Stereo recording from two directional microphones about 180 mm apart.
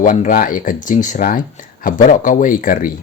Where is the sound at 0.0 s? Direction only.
50° left (ahead or behind).